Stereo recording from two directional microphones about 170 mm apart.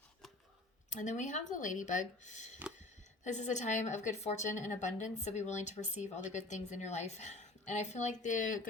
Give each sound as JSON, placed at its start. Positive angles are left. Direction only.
{"t": 0.9, "sound": "speech", "side_deg": 45}